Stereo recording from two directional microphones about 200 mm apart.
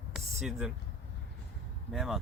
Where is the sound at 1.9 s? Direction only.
Centre (ahead or behind).